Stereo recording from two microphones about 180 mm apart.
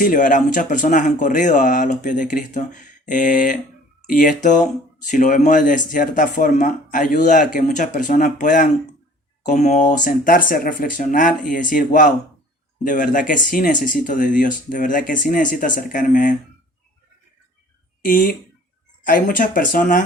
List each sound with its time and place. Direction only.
0.0 s speech: 50° left (ahead or behind)
18.0 s speech: 50° left (ahead or behind)